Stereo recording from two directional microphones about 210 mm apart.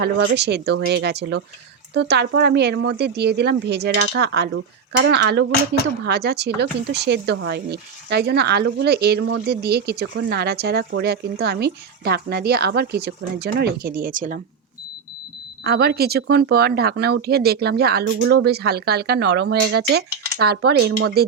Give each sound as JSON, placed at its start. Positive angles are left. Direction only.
{"t": 0.0, "sound": "speech", "side_deg": -55}
{"t": 15.6, "sound": "speech", "side_deg": -50}